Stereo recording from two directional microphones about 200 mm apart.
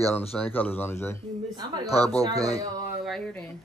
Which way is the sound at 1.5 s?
20° right (ahead or behind).